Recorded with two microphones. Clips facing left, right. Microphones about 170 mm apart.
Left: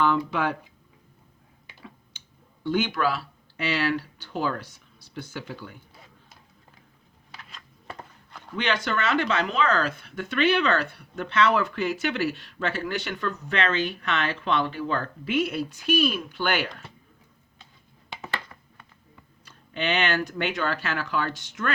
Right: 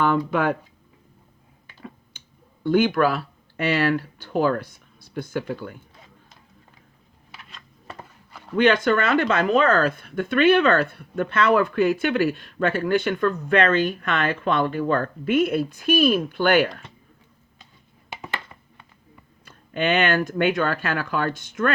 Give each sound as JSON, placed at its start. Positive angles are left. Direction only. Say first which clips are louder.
{"t": 0.0, "sound": "speech", "louder": "right 3 dB", "side_deg": -50}
{"t": 2.6, "sound": "speech", "louder": "right 6 dB", "side_deg": -55}
{"t": 7.3, "sound": "a sound", "louder": "even", "side_deg": -5}
{"t": 8.5, "sound": "speech", "louder": "right 9 dB", "side_deg": -50}
{"t": 18.2, "sound": "a sound", "louder": "even", "side_deg": -20}
{"t": 19.5, "sound": "speech", "louder": "right 5 dB", "side_deg": -50}